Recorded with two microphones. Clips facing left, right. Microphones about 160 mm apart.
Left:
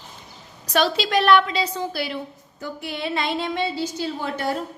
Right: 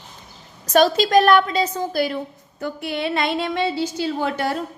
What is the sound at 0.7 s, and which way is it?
A woman's voice, 45° right (ahead or behind).